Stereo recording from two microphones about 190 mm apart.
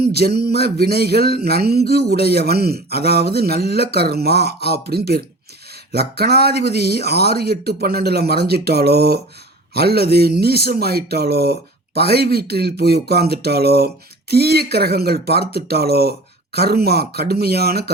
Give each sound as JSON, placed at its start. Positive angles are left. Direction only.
{"t": 0.0, "sound": "speech", "side_deg": -55}